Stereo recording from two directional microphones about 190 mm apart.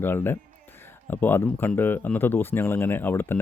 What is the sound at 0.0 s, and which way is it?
Speech, 10° left (ahead or behind).